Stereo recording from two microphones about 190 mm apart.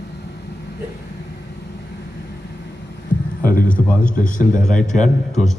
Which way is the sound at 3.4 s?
50° left (ahead or behind).